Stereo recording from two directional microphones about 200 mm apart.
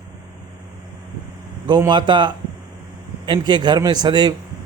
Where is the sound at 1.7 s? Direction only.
20° right (ahead or behind).